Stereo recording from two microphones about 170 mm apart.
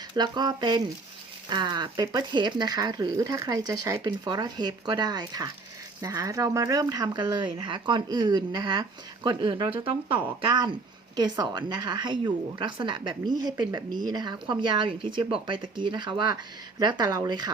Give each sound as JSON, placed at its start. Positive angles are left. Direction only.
{"t": 0.1, "sound": "a woman's voice", "side_deg": -25}